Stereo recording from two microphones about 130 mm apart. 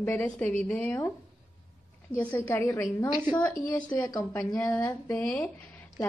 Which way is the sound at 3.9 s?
30° left (ahead or behind).